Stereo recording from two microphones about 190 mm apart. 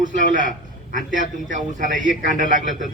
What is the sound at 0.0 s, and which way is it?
A man's voice, 40° right (ahead or behind).